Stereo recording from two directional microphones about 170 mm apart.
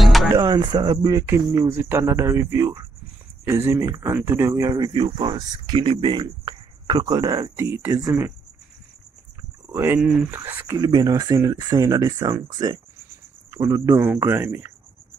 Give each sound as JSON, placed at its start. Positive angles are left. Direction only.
{"t": 0.0, "sound": "music", "side_deg": 0}
{"t": 0.3, "sound": "speech", "side_deg": -20}
{"t": 9.7, "sound": "speech", "side_deg": -15}